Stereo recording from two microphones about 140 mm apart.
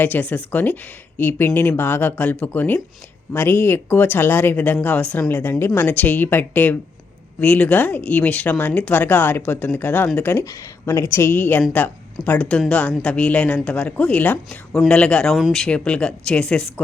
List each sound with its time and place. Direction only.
0.0 s a woman's voice: 10° left (ahead or behind)